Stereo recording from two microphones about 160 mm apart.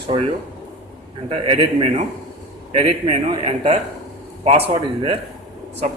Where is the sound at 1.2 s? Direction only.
35° right (ahead or behind).